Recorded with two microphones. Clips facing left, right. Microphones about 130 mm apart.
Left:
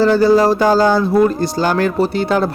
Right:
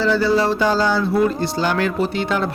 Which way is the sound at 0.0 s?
45° left (ahead or behind).